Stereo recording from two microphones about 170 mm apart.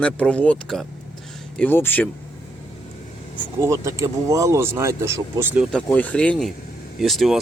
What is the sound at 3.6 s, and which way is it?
Speech, 15° right (ahead or behind).